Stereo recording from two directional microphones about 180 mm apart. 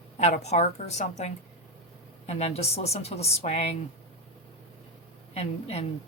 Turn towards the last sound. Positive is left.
turn(degrees=35)  # may be behind; listen again after turning